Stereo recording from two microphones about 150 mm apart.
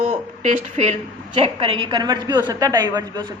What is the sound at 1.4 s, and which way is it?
A woman's voice, 35° right (ahead or behind).